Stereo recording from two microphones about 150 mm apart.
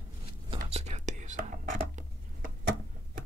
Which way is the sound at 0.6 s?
45° right (ahead or behind).